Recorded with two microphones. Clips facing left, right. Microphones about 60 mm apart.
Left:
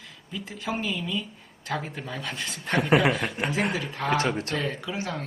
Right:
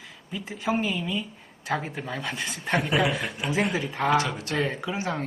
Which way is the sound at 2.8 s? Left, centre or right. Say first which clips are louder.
Left 5 dB; left.